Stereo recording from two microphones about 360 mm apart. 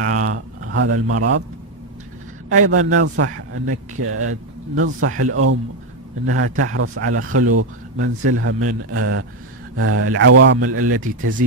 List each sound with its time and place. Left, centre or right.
0.0 s speech: right
2.5 s speech: right